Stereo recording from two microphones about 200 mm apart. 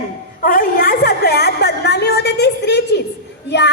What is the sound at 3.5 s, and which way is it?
Speech, 60° left (ahead or behind).